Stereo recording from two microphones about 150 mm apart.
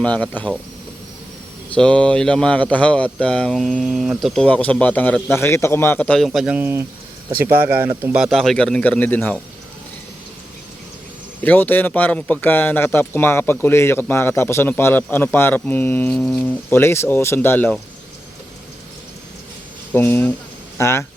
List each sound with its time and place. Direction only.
0.0 s speech: 10° left (ahead or behind)
1.7 s speech: 10° left (ahead or behind)
4.4 s speech: 10° left (ahead or behind)
11.4 s speech: 10° left (ahead or behind)
16.6 s speech: 15° left (ahead or behind)
19.9 s speech: 15° left (ahead or behind)